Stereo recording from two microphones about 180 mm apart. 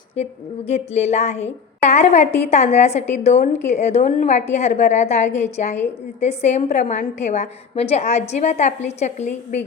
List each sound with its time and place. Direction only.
0.7 s a woman's voice: 35° left (ahead or behind)